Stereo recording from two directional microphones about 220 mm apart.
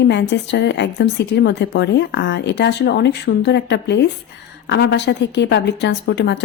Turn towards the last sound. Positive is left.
turn(degrees=50)  # may be behind; listen again after turning